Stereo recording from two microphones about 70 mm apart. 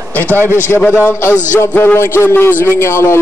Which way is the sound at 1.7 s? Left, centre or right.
Left.